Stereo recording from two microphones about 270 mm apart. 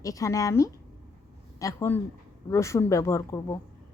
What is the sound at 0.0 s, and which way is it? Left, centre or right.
A woman's voice, centre.